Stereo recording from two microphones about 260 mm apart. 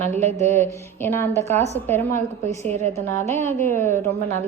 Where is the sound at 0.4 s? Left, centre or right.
Centre.